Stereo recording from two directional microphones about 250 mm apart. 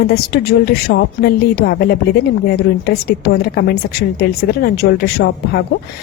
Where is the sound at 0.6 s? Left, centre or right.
Left.